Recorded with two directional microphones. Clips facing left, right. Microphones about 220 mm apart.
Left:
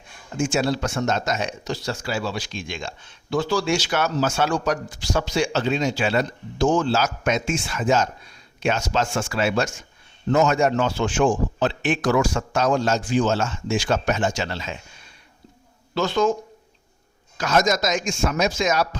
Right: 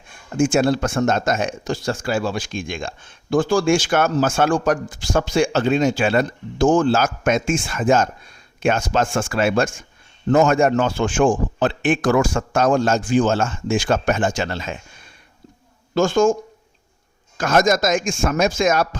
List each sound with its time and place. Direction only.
0.3 s speech: 50° right (ahead or behind)
16.0 s speech: 45° right (ahead or behind)